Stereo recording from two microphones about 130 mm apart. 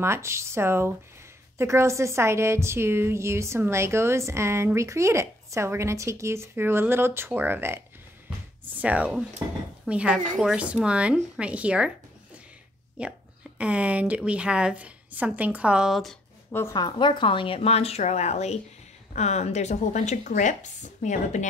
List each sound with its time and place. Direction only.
0.0 s a woman's voice: 20° right (ahead or behind)
8.8 s a woman's voice: 10° right (ahead or behind)
9.4 s a woman's voice: 25° right (ahead or behind)
9.8 s a woman's voice: 10° right (ahead or behind)
13.0 s a woman's voice: 10° right (ahead or behind)
16.7 s a woman's voice: 35° left (ahead or behind)
17.6 s speech: 50° left (ahead or behind); by 21.5 s 70° left (ahead or behind)